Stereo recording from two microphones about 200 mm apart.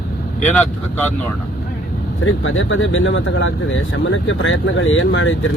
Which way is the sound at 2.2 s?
85° left.